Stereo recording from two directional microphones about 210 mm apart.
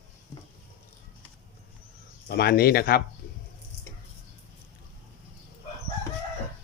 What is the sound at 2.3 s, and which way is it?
Speech, 50° left (ahead or behind).